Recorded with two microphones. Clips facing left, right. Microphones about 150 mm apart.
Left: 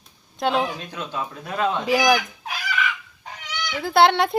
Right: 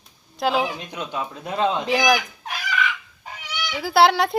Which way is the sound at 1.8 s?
Centre (ahead or behind).